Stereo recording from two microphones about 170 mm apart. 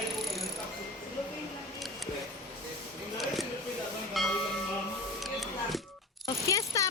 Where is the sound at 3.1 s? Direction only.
Centre (ahead or behind).